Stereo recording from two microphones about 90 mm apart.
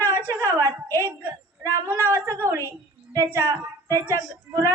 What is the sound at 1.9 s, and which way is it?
A man's voice, 30° right (ahead or behind).